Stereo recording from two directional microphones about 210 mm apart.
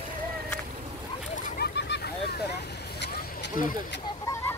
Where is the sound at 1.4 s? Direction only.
50° left (ahead or behind).